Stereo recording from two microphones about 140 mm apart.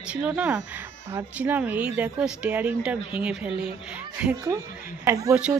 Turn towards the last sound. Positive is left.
turn(degrees=-25)  # may be behind; listen again after turning